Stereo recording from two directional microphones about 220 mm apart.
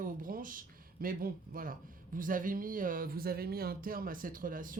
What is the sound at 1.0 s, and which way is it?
Speech, 40° right (ahead or behind).